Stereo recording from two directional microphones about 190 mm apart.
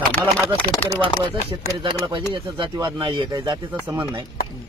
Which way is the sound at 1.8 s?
25° right (ahead or behind).